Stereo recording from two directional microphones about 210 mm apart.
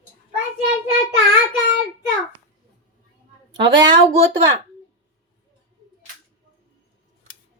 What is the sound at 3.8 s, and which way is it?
Speech, 20° right (ahead or behind).